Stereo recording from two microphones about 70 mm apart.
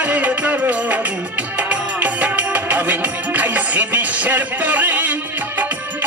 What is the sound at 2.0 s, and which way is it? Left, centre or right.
Music, right.